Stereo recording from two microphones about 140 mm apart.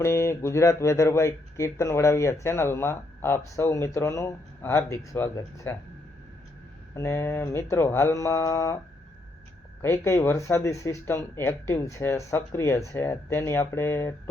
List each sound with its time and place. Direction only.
0.0 s speech: 20° left (ahead or behind)
6.9 s speech: 20° left (ahead or behind)
9.8 s speech: 20° left (ahead or behind)